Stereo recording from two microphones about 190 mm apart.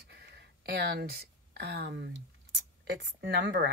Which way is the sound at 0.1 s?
60° right (ahead or behind).